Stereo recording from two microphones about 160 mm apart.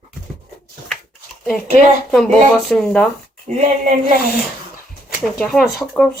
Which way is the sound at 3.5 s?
50° right (ahead or behind).